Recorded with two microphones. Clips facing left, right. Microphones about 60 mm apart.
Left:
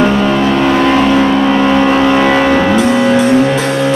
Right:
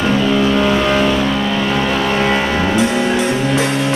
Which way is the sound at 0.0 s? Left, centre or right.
Left.